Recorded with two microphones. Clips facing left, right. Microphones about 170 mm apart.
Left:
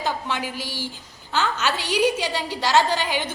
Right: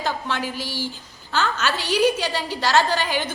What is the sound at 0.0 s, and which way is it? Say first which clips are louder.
A woman's voice: right 1 dB; 15° left (ahead or behind).